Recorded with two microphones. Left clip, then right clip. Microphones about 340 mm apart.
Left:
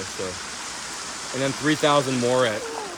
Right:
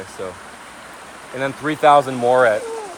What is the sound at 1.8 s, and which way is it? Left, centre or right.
Speech, centre.